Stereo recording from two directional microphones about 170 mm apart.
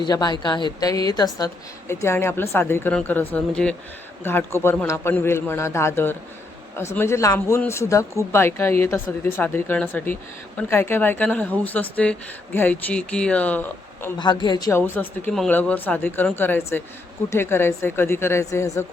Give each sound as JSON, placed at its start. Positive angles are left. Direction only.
{"t": 0.0, "sound": "a woman's voice", "side_deg": 25}
{"t": 14.2, "sound": "speech", "side_deg": 25}